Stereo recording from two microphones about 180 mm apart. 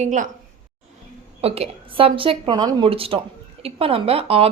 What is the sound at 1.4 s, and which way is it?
Speech, 35° right (ahead or behind).